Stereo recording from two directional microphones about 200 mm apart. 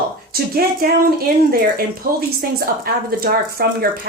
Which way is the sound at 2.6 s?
50° right (ahead or behind).